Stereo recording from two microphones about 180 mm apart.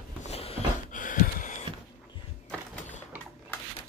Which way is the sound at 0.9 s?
45° left (ahead or behind).